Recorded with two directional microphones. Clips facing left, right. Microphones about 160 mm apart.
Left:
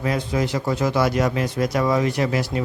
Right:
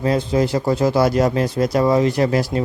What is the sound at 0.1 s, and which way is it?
A man's voice, 30° right (ahead or behind).